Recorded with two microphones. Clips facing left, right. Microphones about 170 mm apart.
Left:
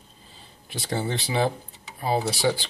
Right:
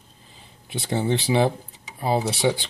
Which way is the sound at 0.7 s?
25° right (ahead or behind).